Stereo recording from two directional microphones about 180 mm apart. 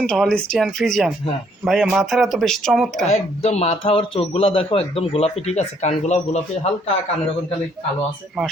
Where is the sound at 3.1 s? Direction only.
35° left (ahead or behind).